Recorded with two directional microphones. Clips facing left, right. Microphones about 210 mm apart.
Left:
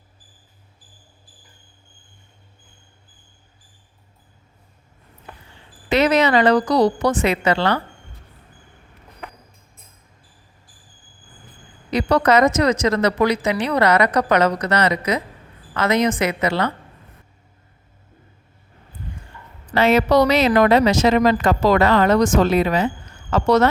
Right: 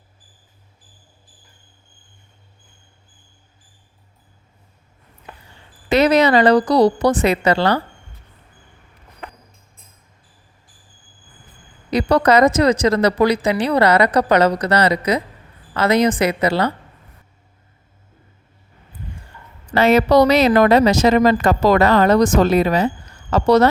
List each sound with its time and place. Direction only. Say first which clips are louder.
5.9 s speech: right 3 dB; 35° right (ahead or behind)
11.9 s speech: right 2 dB; 35° right (ahead or behind)
19.7 s speech: right 2 dB; 40° right (ahead or behind)